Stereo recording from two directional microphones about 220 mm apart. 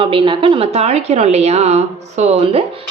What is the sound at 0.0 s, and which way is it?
A woman's voice, 20° right (ahead or behind).